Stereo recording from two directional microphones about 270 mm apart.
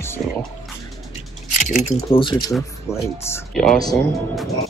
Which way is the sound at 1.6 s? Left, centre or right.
Left.